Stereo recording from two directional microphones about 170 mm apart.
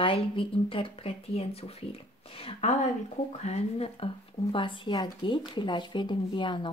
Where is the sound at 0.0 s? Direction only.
30° left (ahead or behind).